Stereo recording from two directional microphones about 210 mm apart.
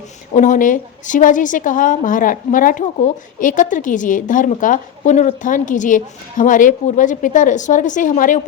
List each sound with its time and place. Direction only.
0.3 s a woman's voice: 35° left (ahead or behind)